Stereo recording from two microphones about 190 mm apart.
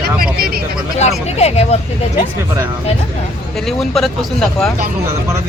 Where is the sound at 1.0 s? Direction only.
35° left (ahead or behind).